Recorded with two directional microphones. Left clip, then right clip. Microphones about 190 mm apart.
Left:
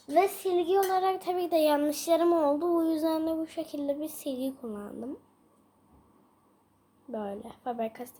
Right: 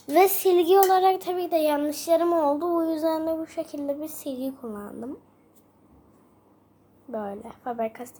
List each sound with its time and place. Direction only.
0.1 s a child's voice: 50° right (ahead or behind)
0.9 s child singing: 25° right (ahead or behind)
1.2 s child singing: 5° right (ahead or behind)
7.1 s child singing: centre (ahead or behind)